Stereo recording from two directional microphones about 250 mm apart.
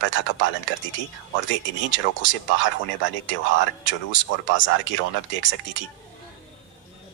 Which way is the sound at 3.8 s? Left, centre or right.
Left.